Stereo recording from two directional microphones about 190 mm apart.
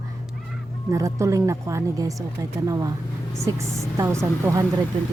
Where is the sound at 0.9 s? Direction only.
15° right (ahead or behind).